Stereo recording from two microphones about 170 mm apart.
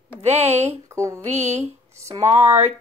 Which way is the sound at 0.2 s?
40° right (ahead or behind).